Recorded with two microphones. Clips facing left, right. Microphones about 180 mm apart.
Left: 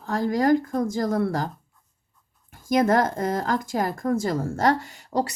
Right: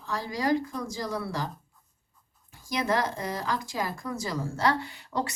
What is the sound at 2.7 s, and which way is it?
Speech, 50° left (ahead or behind).